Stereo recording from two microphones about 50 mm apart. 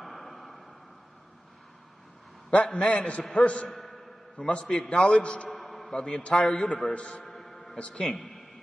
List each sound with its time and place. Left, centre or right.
0.0 s a sound: centre
2.5 s a man's voice: left
3.7 s a sound: centre
4.4 s a man's voice: centre
5.5 s a sound: centre
5.9 s a man's voice: centre
7.2 s music: centre
7.7 s a man's voice: centre
8.1 s a man's voice: centre